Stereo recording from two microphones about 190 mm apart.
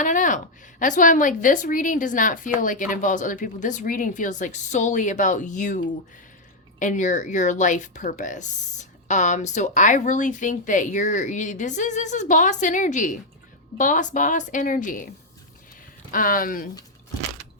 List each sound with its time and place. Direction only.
0.0 s a woman's voice: 40° left (ahead or behind)
16.1 s a woman's voice: 45° left (ahead or behind)